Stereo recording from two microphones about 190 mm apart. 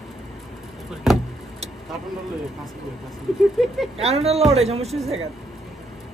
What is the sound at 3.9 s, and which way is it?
Speech, 30° right (ahead or behind).